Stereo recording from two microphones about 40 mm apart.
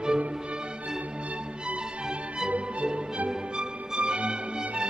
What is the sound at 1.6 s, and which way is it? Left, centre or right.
Music, right.